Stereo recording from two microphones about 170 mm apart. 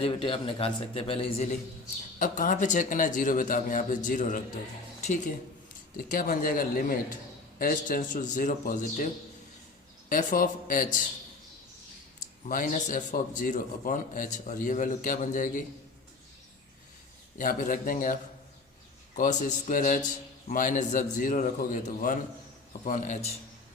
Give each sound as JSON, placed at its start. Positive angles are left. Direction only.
{"t": 0.0, "sound": "a man's voice", "side_deg": 35}
{"t": 2.1, "sound": "a man's voice", "side_deg": 50}
{"t": 10.1, "sound": "a man's voice", "side_deg": 55}
{"t": 12.5, "sound": "a man's voice", "side_deg": 50}
{"t": 17.3, "sound": "a man's voice", "side_deg": 55}